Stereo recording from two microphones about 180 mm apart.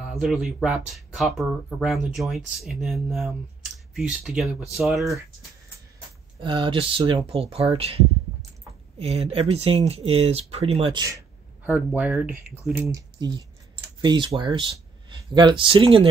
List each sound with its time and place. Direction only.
0.1 s speech: centre (ahead or behind)
6.4 s speech: 30° right (ahead or behind)
11.0 s speech: 15° right (ahead or behind)